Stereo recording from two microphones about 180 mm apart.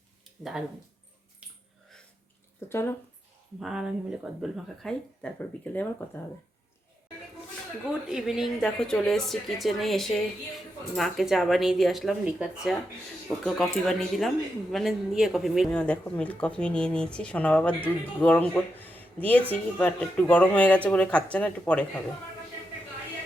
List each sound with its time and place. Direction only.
0.3 s a sound: centre (ahead or behind)
1.4 s wheeze: 5° right (ahead or behind)
2.6 s a woman's voice: 15° left (ahead or behind)
3.6 s speech: centre (ahead or behind)
7.9 s a woman's voice: 5° right (ahead or behind)